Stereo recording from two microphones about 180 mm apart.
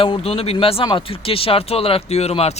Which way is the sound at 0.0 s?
30° left (ahead or behind).